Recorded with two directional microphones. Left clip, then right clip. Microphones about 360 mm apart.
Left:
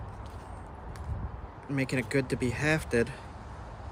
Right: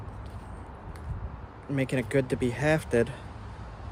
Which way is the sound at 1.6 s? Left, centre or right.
Centre.